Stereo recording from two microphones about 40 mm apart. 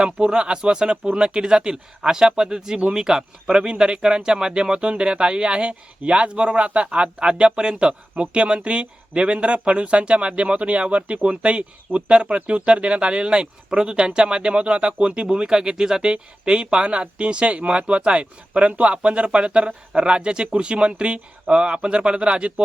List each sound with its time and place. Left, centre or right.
0.0 s speech: right